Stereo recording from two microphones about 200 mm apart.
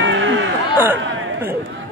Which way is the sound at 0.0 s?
70° right (ahead or behind).